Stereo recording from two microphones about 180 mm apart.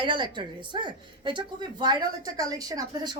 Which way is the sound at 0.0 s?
25° right (ahead or behind).